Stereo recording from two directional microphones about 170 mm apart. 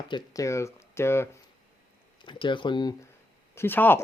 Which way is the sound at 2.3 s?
30° left (ahead or behind).